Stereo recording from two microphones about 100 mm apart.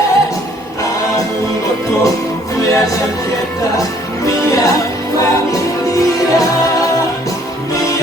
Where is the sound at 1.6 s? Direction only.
35° left (ahead or behind).